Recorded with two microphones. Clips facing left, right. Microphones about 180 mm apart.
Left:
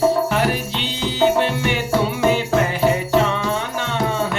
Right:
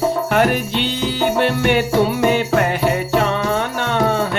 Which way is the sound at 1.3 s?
55° right (ahead or behind).